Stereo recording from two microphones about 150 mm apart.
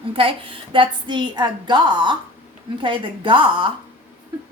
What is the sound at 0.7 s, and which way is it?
A woman's voice, 30° right (ahead or behind).